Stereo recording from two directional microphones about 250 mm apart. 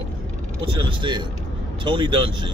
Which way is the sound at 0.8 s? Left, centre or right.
Centre.